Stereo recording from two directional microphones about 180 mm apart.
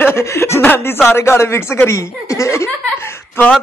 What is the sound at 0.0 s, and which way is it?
Speech, 15° left (ahead or behind).